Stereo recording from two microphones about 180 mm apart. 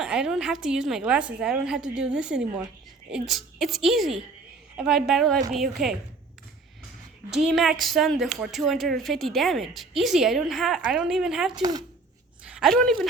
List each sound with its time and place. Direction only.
0.0 s a woman's voice: 5° right (ahead or behind)
7.3 s a woman's voice: centre (ahead or behind)
11.5 s speech: 20° right (ahead or behind)
12.5 s a woman's voice: centre (ahead or behind)